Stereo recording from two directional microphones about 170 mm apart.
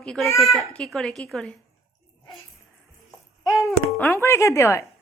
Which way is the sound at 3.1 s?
20° left (ahead or behind).